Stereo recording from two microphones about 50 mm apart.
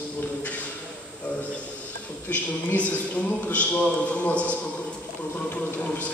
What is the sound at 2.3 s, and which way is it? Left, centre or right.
A man's voice, left.